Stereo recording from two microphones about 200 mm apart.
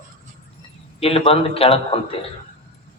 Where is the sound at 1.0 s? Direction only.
30° left (ahead or behind).